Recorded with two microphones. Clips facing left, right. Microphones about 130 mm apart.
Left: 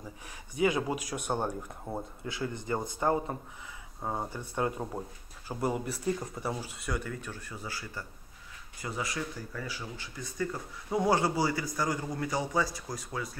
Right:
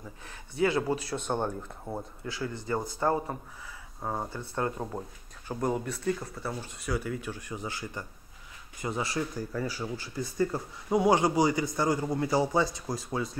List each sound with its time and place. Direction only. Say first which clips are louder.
0.6 s a man's voice: right 2 dB; 15° left (ahead or behind)
7.1 s speech: right 5 dB; 10° right (ahead or behind); by 10.6 s 35° right (ahead or behind)
11.0 s a man's voice: right 3 dB; 15° right (ahead or behind)